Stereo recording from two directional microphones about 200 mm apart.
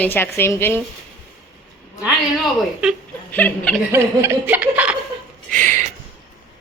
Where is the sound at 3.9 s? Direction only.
10° right (ahead or behind).